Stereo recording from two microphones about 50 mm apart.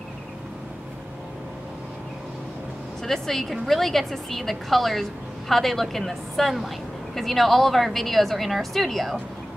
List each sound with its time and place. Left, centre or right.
3.0 s a woman's voice: centre